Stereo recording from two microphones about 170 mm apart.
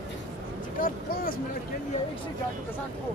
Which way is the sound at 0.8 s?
60° left (ahead or behind).